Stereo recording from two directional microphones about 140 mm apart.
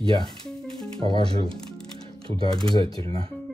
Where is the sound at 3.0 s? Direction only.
40° right (ahead or behind).